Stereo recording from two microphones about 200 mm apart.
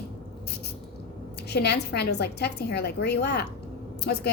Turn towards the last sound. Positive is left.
turn(degrees=55)  # may be behind; listen again after turning